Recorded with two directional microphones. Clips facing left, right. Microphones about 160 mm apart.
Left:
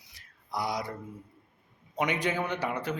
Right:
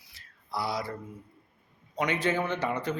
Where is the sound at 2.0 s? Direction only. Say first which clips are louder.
Right 1 dB; 15° left (ahead or behind).